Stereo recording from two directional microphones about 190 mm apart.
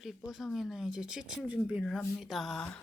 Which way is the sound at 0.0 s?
Centre (ahead or behind).